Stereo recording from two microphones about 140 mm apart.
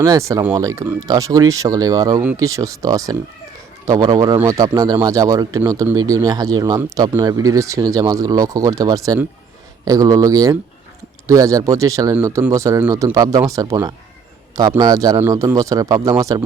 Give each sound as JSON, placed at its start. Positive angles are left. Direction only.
{"t": 0.0, "sound": "speech", "side_deg": -25}